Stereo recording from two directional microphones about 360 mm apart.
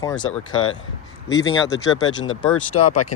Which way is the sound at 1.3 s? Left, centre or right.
Centre.